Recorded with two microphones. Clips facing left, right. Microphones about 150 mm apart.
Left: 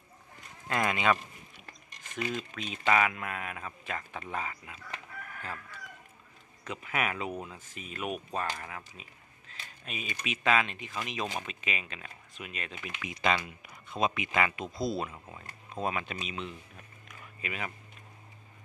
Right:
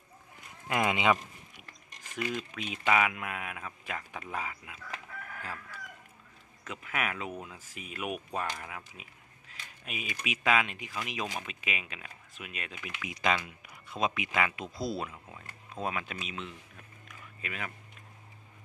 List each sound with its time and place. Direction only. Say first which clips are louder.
0.7 s speech: right 1 dB; 15° right (ahead or behind)
2.5 s speech: left 1 dB; 10° right (ahead or behind)